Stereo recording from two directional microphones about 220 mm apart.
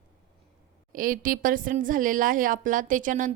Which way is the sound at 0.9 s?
40° right (ahead or behind).